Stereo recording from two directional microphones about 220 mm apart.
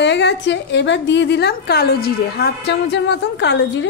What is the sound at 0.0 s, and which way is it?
A woman's voice, 50° left (ahead or behind).